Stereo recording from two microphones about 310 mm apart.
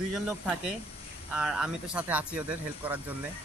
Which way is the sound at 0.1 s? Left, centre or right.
Centre.